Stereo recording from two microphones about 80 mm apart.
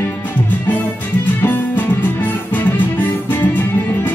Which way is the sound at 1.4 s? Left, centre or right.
Left.